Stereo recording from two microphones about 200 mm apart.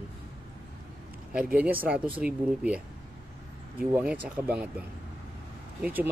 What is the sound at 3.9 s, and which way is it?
Speech, 5° right (ahead or behind).